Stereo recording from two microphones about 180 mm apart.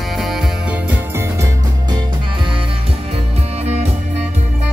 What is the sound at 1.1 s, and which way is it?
Music, 15° right (ahead or behind).